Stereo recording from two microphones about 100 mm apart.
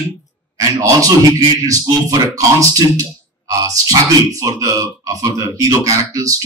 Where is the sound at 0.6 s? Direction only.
35° right (ahead or behind).